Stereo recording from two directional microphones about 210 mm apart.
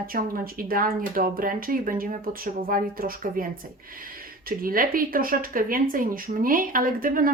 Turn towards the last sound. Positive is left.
turn(degrees=-40)  # may be behind; listen again after turning